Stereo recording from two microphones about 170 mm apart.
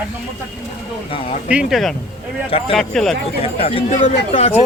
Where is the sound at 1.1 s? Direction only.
35° left (ahead or behind).